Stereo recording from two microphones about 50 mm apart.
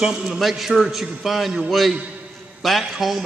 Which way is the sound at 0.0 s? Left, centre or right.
Centre.